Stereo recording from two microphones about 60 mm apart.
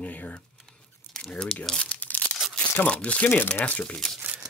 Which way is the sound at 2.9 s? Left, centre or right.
Centre.